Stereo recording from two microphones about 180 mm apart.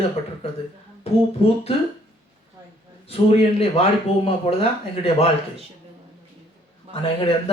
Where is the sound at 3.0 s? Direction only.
35° left (ahead or behind).